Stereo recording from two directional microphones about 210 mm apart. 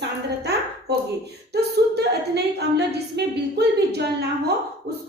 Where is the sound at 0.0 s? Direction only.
50° right (ahead or behind).